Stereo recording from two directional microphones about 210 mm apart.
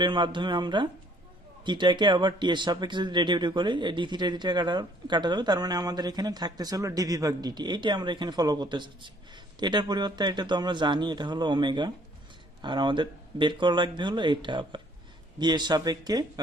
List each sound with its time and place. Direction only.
0.0 s speech: 20° right (ahead or behind)